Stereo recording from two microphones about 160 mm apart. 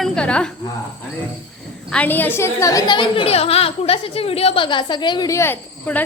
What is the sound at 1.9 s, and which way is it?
A woman's voice, 10° left (ahead or behind).